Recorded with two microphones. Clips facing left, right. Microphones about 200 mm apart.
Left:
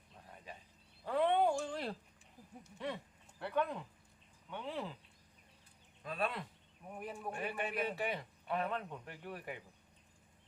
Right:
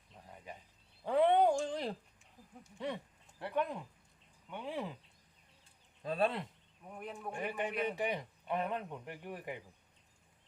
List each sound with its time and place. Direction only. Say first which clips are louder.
1.0 s a sound: right 4 dB; 15° right (ahead or behind)
2.6 s speech: right 2 dB; 15° right (ahead or behind)
6.0 s speech: right 5 dB; 30° right (ahead or behind)
6.8 s speech: even; 5° left (ahead or behind)
7.4 s speech: right 3 dB; 15° right (ahead or behind)